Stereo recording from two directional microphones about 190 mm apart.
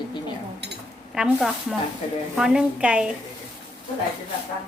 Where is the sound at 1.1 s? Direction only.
5° right (ahead or behind).